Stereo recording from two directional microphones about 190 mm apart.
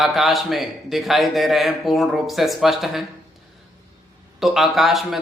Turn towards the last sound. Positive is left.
turn(degrees=0)  # may be behind; listen again after turning